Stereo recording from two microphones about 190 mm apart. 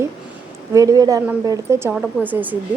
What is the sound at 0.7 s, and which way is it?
A woman's voice, 15° right (ahead or behind).